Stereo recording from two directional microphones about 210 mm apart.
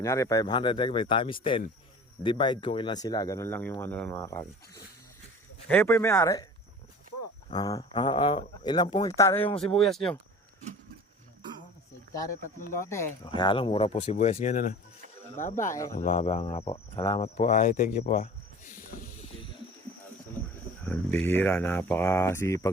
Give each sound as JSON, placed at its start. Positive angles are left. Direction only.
{"t": 0.0, "sound": "speech", "side_deg": 15}
{"t": 7.5, "sound": "speech", "side_deg": 15}
{"t": 9.6, "sound": "speech", "side_deg": 0}
{"t": 12.9, "sound": "speech", "side_deg": 15}
{"t": 15.6, "sound": "speech", "side_deg": 15}
{"t": 16.0, "sound": "speech", "side_deg": 40}
{"t": 20.8, "sound": "speech", "side_deg": 10}